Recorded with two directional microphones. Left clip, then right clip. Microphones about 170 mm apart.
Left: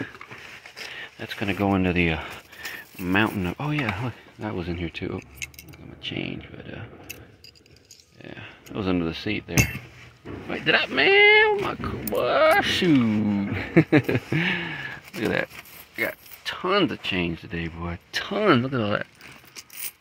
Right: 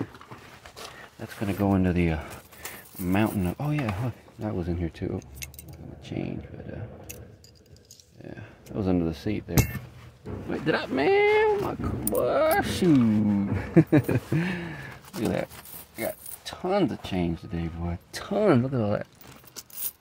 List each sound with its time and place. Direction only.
1.4 s speech: centre (ahead or behind)
4.6 s speech: 15° right (ahead or behind)
8.4 s speech: 15° right (ahead or behind)
10.6 s speech: 30° right (ahead or behind)
11.0 s speech: 10° right (ahead or behind)
11.6 s speech: 5° left (ahead or behind)
12.2 s speech: 15° right (ahead or behind)
13.1 s speech: 5° left (ahead or behind); by 17.6 s 15° right (ahead or behind)
18.1 s speech: 25° right (ahead or behind)